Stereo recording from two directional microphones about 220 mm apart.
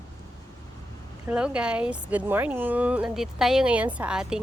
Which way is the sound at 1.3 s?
5° right (ahead or behind).